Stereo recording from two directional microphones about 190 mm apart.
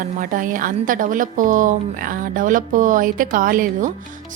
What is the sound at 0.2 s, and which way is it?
Speech, 45° right (ahead or behind).